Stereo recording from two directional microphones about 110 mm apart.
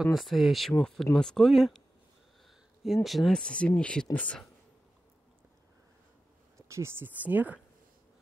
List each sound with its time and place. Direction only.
0.0 s speech: centre (ahead or behind)
6.7 s speech: 20° right (ahead or behind)